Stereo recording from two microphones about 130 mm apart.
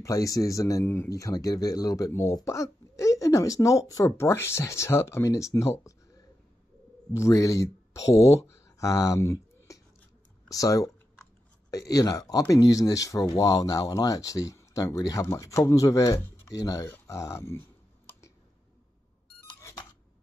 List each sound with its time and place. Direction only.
0.0 s speech: 25° left (ahead or behind)
7.2 s speech: 25° left (ahead or behind)